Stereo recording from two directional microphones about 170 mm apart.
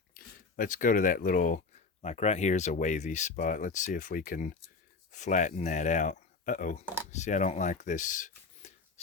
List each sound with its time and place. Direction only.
0.1 s speech: 55° left (ahead or behind)